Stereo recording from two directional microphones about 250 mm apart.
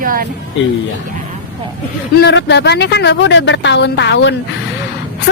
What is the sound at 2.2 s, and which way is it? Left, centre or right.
Speech, left.